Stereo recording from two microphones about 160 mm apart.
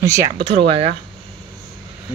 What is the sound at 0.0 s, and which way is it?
Speech, 20° right (ahead or behind).